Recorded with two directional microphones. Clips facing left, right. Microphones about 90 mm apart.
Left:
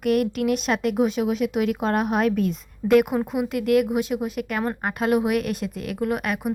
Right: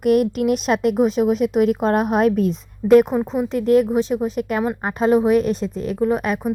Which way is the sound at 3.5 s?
35° right (ahead or behind).